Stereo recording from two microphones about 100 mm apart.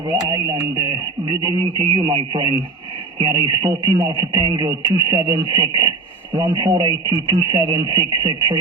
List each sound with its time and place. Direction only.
0.1 s speech: 30° right (ahead or behind)
2.0 s speech: 55° right (ahead or behind); by 5.5 s 30° right (ahead or behind)
5.5 s speech: 40° right (ahead or behind)
6.3 s speech: 20° right (ahead or behind)
6.6 s speech: 45° right (ahead or behind)